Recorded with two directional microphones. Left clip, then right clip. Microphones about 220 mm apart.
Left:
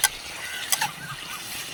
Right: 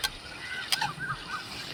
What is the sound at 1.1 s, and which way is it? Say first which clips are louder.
Vehicle: even; 55° left (ahead or behind).